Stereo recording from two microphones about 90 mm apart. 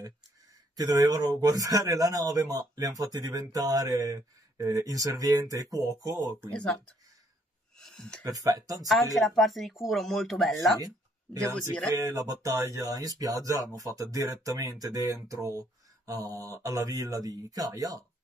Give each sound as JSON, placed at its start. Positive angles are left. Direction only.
{"t": 0.7, "sound": "speech", "side_deg": -40}
{"t": 6.5, "sound": "speech", "side_deg": 10}
{"t": 8.2, "sound": "speech", "side_deg": -40}
{"t": 8.8, "sound": "speech", "side_deg": 0}
{"t": 12.1, "sound": "speech", "side_deg": -40}